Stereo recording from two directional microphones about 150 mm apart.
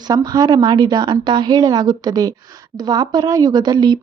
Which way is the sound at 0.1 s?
25° right (ahead or behind).